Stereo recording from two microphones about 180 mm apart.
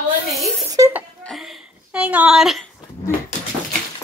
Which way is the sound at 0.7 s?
15° right (ahead or behind).